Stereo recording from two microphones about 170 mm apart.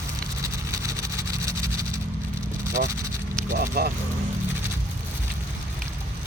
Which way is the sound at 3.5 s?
60° right (ahead or behind).